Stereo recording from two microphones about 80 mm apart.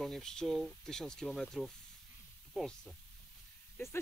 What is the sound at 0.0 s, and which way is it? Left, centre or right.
Speech, centre.